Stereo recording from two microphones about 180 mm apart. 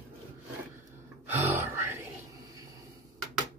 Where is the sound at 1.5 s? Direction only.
10° right (ahead or behind).